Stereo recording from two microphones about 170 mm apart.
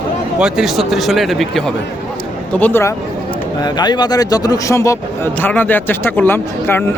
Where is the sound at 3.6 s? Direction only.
25° left (ahead or behind).